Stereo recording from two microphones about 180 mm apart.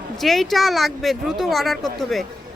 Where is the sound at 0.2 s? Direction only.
Centre (ahead or behind).